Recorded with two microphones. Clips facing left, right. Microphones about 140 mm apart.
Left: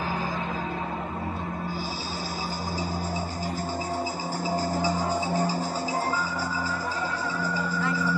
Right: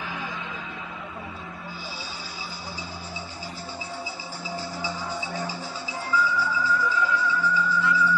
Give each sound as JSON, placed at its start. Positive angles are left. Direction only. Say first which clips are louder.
{"t": 4.5, "sound": "music", "louder": "left 6 dB", "side_deg": 40}